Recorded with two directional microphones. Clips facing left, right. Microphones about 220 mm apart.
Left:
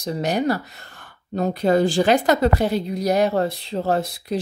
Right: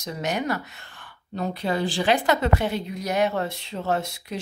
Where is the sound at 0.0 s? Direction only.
35° left (ahead or behind).